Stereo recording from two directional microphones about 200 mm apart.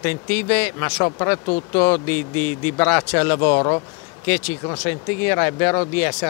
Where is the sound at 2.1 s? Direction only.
10° left (ahead or behind).